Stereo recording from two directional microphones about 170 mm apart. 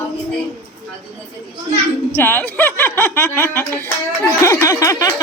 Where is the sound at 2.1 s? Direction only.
15° left (ahead or behind).